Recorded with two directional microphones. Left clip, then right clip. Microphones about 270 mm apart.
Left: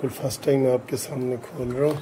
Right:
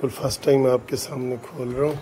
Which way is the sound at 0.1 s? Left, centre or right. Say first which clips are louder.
Right 4 dB; centre.